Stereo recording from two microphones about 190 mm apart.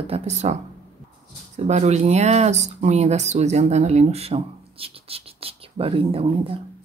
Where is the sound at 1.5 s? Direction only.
35° right (ahead or behind).